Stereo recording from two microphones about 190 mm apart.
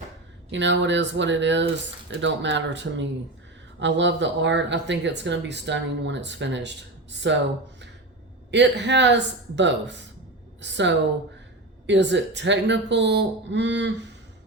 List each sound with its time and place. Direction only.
0.5 s speech: 70° right (ahead or behind)
8.4 s speech: 65° right (ahead or behind)